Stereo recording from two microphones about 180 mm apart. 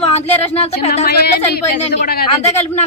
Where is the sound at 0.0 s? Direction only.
35° left (ahead or behind).